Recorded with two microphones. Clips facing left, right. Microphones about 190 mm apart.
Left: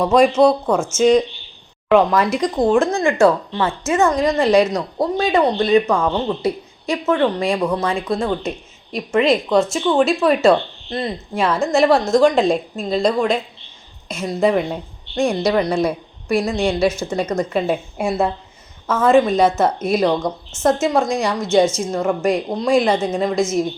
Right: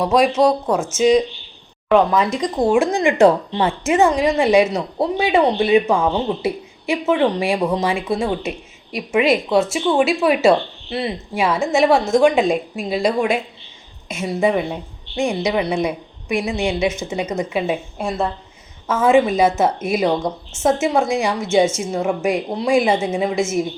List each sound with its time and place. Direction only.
0.0 s a woman's voice: centre (ahead or behind)
16.8 s speech: 20° right (ahead or behind)
17.1 s a woman's voice: 5° right (ahead or behind)
17.9 s speech: 10° left (ahead or behind)
18.9 s a woman's voice: 5° right (ahead or behind)